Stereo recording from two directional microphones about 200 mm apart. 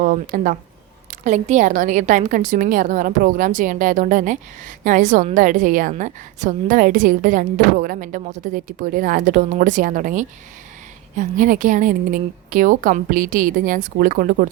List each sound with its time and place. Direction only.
0.0 s a woman's voice: 45° right (ahead or behind)